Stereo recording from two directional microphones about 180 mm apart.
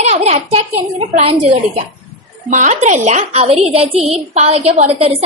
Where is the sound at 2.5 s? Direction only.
45° right (ahead or behind).